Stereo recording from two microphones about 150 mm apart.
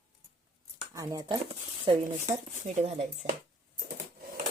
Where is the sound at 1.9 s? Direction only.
35° right (ahead or behind).